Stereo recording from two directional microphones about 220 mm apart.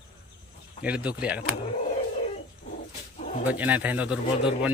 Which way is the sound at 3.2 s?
35° left (ahead or behind).